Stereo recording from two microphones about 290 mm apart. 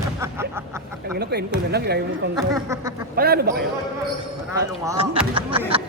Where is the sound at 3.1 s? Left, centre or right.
Right.